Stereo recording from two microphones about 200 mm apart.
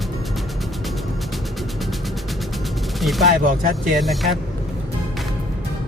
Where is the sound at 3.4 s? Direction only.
40° right (ahead or behind).